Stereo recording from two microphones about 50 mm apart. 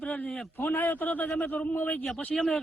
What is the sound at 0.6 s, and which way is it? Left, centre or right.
A man's voice, left.